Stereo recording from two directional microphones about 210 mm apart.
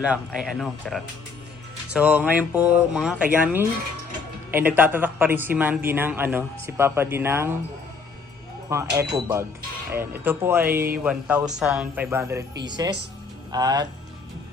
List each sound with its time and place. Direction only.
0.0 s speech: 5° right (ahead or behind)
8.7 s speech: 10° right (ahead or behind)